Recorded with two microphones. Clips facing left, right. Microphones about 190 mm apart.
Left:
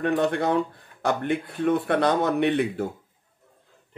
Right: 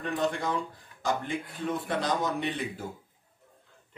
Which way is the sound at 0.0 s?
65° left (ahead or behind).